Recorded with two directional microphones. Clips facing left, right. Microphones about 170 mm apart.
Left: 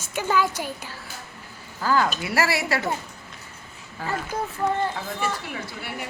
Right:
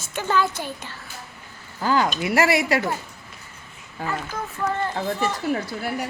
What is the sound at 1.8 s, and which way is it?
Speech, 20° right (ahead or behind).